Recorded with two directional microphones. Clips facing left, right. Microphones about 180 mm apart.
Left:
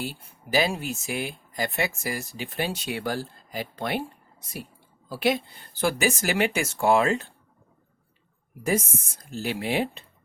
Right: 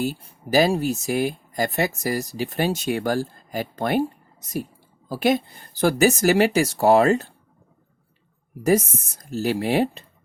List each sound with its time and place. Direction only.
0.0 s speech: 45° right (ahead or behind)
8.6 s speech: 40° right (ahead or behind)